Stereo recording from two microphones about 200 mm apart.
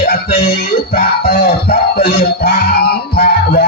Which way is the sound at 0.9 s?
50° left (ahead or behind).